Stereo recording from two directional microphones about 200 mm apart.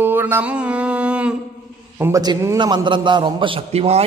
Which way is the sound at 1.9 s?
15° right (ahead or behind).